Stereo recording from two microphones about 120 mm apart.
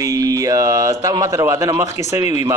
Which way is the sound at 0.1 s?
30° right (ahead or behind).